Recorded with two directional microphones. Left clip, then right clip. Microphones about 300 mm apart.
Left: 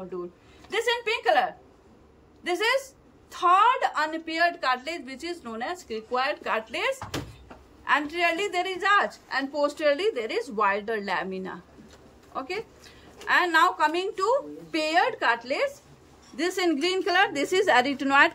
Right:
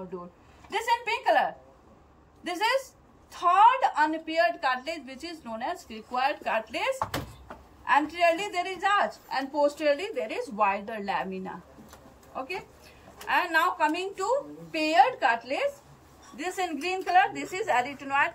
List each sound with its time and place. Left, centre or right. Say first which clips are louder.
0.7 s a woman's voice: left 1 dB; centre
2.4 s a woman's voice: left 2 dB; centre
13.3 s a woman's voice: left 4 dB; centre